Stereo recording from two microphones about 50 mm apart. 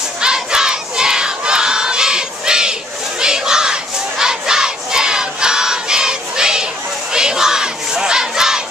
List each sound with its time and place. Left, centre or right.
0.2 s crowd: centre
3.2 s battle cry: centre